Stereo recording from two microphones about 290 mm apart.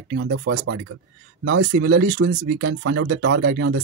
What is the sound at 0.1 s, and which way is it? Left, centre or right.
Speech, right.